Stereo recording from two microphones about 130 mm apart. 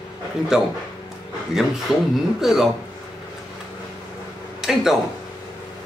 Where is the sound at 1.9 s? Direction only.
5° right (ahead or behind).